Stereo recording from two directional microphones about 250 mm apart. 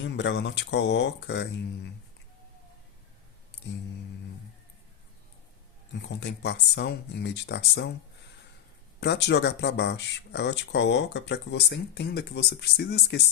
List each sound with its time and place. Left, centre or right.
0.0 s speech: left
3.5 s music: left
5.9 s speech: left
9.0 s speech: left